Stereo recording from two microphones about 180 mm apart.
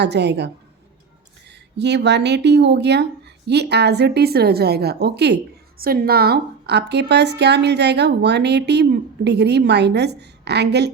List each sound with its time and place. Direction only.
0.0 s a woman's voice: 70° right (ahead or behind)
1.8 s a woman's voice: 70° right (ahead or behind)
5.8 s a woman's voice: 55° right (ahead or behind)